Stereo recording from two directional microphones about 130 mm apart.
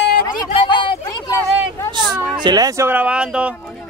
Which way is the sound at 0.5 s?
40° left (ahead or behind).